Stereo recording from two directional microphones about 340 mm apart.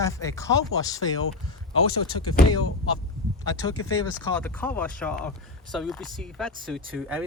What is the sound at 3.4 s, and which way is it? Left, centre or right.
Speech, centre.